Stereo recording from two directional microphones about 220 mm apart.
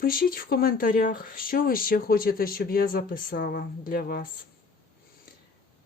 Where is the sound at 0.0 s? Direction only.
40° left (ahead or behind).